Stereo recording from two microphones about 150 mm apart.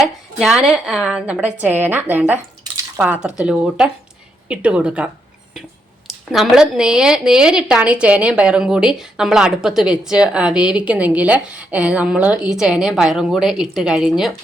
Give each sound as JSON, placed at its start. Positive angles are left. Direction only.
{"t": 0.3, "sound": "speech", "side_deg": 0}
{"t": 6.1, "sound": "speech", "side_deg": -5}